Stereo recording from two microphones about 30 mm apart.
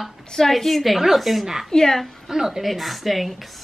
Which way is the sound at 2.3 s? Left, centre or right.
Centre.